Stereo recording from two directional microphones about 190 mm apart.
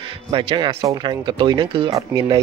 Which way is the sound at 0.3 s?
25° right (ahead or behind).